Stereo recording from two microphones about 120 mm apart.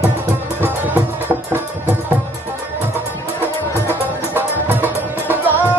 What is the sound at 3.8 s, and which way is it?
Music, 15° right (ahead or behind).